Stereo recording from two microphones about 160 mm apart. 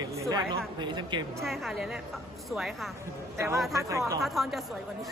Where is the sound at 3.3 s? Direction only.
15° right (ahead or behind).